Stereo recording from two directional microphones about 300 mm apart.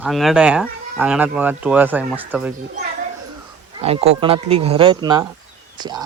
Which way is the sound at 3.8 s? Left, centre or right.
Centre.